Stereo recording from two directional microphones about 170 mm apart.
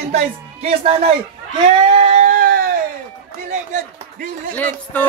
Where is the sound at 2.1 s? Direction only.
50° right (ahead or behind).